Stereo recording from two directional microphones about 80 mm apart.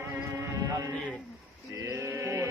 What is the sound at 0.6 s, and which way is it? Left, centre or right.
Music, right.